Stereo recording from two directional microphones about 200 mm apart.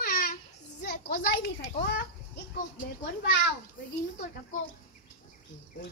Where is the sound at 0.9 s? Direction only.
45° left (ahead or behind).